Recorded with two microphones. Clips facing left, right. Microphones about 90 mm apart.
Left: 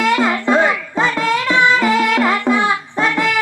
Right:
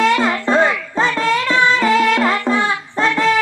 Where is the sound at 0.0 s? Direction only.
35° right (ahead or behind).